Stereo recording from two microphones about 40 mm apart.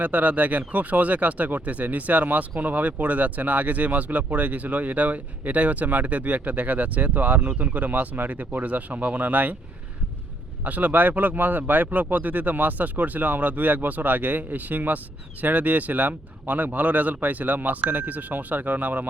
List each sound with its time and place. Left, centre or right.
0.0 s speech: right
10.6 s speech: right